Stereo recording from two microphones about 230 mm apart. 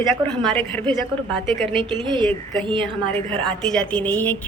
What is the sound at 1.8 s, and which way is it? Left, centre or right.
Speech, right.